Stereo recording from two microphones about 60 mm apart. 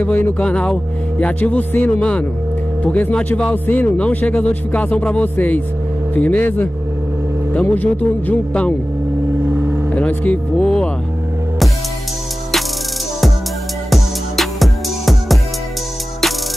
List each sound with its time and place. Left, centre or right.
0.0 s speech: left
0.4 s speech: centre
7.7 s speech: left
9.5 s vehicle: right
9.8 s speech: left
10.6 s speech: centre
13.8 s music: centre